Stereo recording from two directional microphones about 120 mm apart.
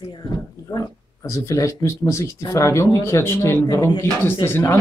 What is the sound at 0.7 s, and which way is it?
Speech, 30° left (ahead or behind).